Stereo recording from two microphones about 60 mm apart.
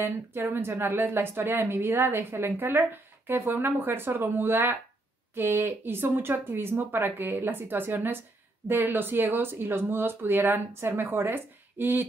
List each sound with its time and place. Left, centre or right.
0.0 s speech: right